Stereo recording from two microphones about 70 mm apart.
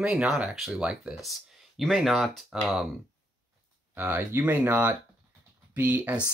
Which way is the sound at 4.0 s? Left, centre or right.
Right.